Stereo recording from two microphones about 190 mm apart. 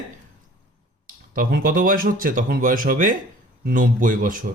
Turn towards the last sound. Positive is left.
turn(degrees=-45)  # may be behind; listen again after turning